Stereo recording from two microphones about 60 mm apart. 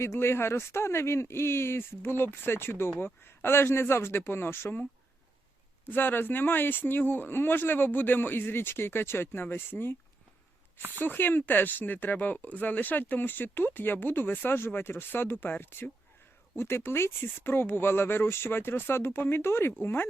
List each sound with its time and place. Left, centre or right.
0.0 s speech: left
5.8 s speech: left
10.9 s speech: left
16.6 s speech: left